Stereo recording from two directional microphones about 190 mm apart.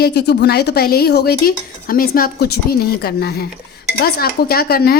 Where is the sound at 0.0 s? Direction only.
60° left (ahead or behind).